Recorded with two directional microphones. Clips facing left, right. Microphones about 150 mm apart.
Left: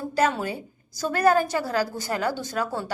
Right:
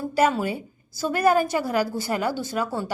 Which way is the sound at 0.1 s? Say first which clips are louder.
Right 2 dB; 5° right (ahead or behind).